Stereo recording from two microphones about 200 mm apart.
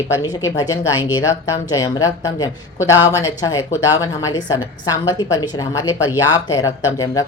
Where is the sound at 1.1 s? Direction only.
15° left (ahead or behind).